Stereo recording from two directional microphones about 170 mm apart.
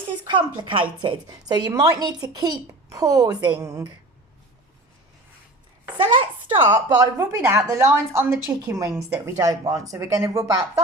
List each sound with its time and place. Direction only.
0.3 s a woman's voice: 25° right (ahead or behind)
6.1 s a woman's voice: 25° right (ahead or behind)